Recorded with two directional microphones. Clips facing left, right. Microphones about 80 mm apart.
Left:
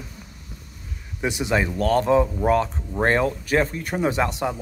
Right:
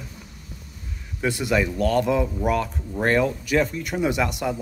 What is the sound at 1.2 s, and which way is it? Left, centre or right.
Speech, centre.